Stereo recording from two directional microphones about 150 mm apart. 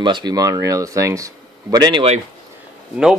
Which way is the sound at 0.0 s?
30° right (ahead or behind).